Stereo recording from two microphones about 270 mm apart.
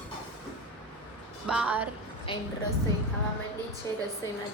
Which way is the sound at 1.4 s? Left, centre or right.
Centre.